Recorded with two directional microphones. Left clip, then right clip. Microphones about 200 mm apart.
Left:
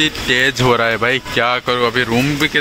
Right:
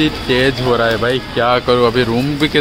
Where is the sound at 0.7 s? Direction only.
15° left (ahead or behind).